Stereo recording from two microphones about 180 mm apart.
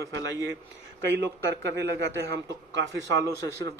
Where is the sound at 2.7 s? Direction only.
85° right.